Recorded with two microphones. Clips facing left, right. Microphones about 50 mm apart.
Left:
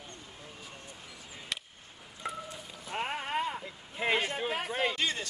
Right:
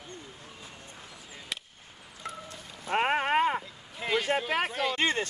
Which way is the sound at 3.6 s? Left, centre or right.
Left.